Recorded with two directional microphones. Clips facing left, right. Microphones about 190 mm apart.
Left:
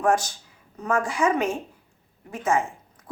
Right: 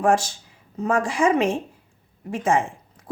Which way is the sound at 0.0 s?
30° right (ahead or behind).